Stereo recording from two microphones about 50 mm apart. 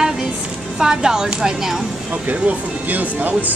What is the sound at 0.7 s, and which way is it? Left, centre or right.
Speech, centre.